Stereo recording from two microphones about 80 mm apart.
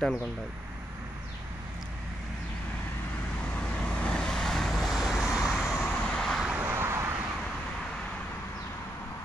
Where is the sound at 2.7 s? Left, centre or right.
Centre.